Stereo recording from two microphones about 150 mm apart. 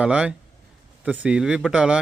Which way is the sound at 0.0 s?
10° right (ahead or behind).